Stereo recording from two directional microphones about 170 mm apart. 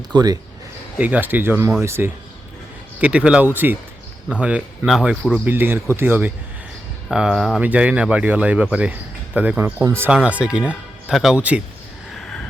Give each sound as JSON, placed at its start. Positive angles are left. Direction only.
{"t": 0.1, "sound": "a man's voice", "side_deg": -25}
{"t": 0.9, "sound": "speech", "side_deg": -10}
{"t": 12.1, "sound": "a sound", "side_deg": 5}